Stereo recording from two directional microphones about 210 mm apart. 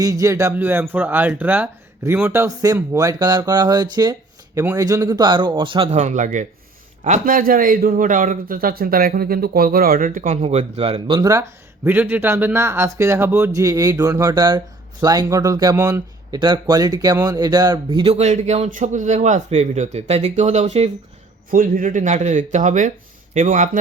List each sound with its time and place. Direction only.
0.0 s a man's voice: 15° right (ahead or behind); by 23.6 s 35° right (ahead or behind)